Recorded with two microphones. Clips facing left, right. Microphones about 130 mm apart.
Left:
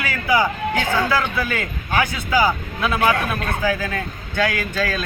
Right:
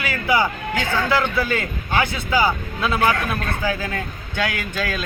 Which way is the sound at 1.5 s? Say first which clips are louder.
Right 1 dB; 25° right (ahead or behind).